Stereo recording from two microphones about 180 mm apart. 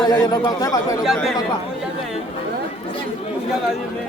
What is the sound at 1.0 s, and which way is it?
Speech, centre (ahead or behind).